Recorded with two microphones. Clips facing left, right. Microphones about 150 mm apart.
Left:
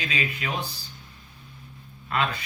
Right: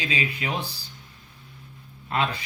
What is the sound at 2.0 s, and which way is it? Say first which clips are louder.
Speech: right 1 dB; 25° right (ahead or behind).